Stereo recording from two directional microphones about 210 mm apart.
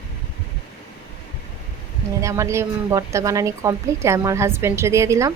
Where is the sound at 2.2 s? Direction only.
15° right (ahead or behind).